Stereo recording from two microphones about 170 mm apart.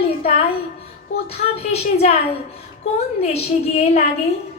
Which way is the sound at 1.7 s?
35° left (ahead or behind).